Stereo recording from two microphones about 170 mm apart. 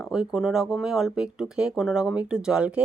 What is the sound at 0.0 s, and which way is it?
A woman's voice, 5° right (ahead or behind).